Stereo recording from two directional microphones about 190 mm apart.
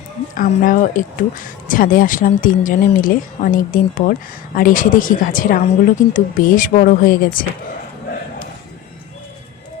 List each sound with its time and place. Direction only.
0.3 s speech: 45° left (ahead or behind)